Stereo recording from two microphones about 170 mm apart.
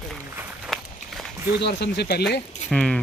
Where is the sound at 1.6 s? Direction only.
75° left (ahead or behind).